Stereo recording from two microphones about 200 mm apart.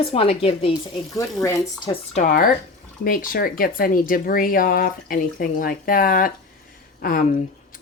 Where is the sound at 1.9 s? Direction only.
35° left (ahead or behind).